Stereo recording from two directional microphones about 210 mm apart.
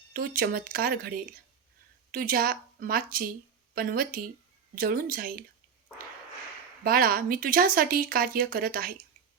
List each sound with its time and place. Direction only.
0.1 s speech: 45° right (ahead or behind)
2.1 s speech: 45° right (ahead or behind)
6.8 s speech: 45° right (ahead or behind)